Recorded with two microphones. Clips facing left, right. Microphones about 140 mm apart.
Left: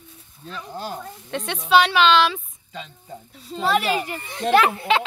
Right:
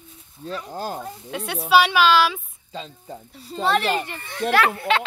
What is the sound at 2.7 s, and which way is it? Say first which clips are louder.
Speech: right 2 dB; 30° right (ahead or behind).